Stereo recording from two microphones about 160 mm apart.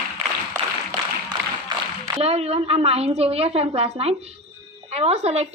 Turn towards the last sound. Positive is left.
turn(degrees=-40)  # may be behind; listen again after turning